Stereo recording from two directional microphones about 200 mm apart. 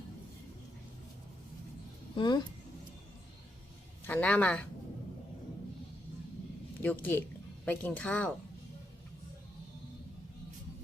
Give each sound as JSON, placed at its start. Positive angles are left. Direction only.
{"t": 2.1, "sound": "speech", "side_deg": 20}
{"t": 4.0, "sound": "speech", "side_deg": 10}
{"t": 6.8, "sound": "speech", "side_deg": 10}